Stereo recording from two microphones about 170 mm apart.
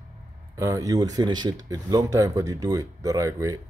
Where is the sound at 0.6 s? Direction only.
20° right (ahead or behind).